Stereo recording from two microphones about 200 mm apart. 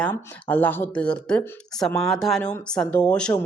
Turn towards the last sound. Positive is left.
turn(degrees=5)  # may be behind; listen again after turning